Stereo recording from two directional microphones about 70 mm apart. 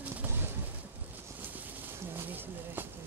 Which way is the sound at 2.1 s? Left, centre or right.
Right.